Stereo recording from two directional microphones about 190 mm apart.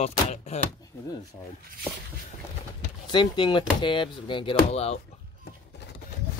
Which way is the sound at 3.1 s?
25° left (ahead or behind).